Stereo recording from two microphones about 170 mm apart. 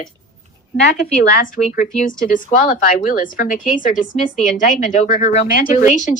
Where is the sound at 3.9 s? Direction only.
Centre (ahead or behind).